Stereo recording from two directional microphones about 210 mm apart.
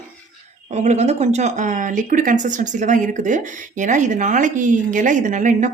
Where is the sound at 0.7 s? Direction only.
30° right (ahead or behind).